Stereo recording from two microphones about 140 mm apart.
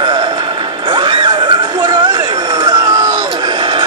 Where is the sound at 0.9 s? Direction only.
35° right (ahead or behind).